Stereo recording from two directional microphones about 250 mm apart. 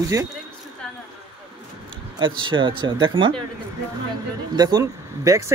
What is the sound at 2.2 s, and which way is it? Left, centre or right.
Speech, centre.